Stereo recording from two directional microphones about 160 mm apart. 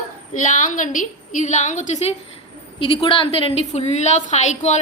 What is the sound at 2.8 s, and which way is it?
A woman's voice, 35° left (ahead or behind).